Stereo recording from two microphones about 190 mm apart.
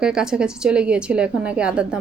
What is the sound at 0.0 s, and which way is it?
A woman's voice, 5° right (ahead or behind).